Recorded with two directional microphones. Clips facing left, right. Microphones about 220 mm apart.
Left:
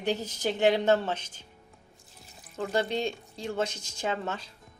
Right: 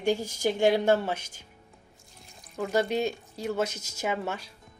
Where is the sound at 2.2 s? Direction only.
5° left (ahead or behind).